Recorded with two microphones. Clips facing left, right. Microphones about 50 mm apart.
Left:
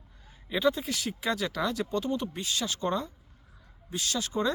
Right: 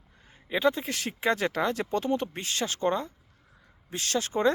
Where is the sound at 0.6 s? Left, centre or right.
Right.